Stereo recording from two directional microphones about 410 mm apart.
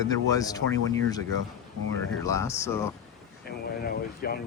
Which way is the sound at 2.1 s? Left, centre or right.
Centre.